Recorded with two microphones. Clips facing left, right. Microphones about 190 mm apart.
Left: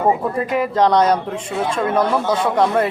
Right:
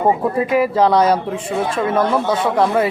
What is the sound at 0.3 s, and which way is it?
Speech, 5° right (ahead or behind).